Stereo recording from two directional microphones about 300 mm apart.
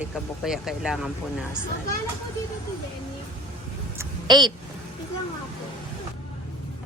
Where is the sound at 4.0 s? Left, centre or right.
Centre.